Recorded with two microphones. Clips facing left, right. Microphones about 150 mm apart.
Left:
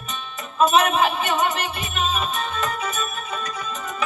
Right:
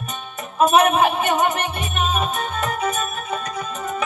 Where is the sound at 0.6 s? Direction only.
50° right (ahead or behind).